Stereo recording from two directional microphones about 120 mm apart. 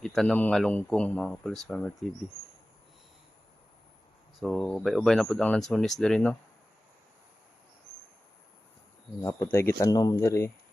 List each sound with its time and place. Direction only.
0.0 s speech: centre (ahead or behind)
4.4 s speech: centre (ahead or behind)
9.2 s speech: 25° left (ahead or behind)